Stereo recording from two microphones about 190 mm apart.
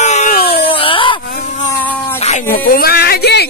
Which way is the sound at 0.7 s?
25° left (ahead or behind).